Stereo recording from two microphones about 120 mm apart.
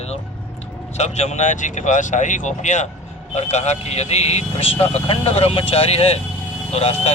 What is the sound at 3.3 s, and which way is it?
Speech, 70° left (ahead or behind).